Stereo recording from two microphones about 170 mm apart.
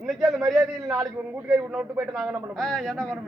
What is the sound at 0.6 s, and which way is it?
Speech, 15° right (ahead or behind).